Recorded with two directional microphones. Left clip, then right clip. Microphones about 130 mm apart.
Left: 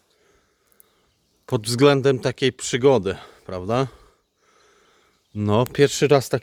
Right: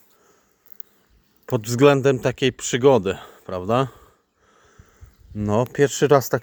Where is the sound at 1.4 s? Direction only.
20° left (ahead or behind).